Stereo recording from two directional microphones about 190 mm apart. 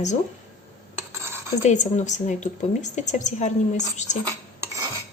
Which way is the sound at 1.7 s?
40° left (ahead or behind).